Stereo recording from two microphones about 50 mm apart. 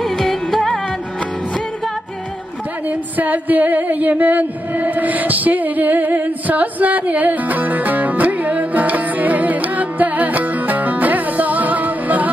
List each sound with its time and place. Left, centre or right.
0.0 s music: centre
2.9 s singing: right